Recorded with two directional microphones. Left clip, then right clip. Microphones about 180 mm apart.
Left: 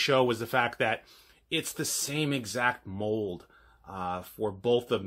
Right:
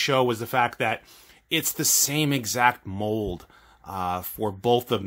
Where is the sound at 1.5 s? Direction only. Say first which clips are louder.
Right 7 dB; 30° right (ahead or behind).